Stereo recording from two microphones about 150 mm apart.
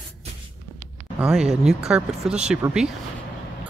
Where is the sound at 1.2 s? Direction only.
5° right (ahead or behind).